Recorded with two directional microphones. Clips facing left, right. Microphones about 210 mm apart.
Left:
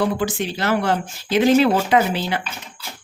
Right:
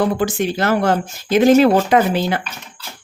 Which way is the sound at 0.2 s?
50° right (ahead or behind).